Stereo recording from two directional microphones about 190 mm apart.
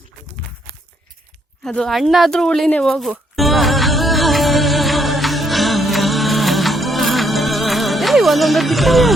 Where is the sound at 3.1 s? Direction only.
Centre (ahead or behind).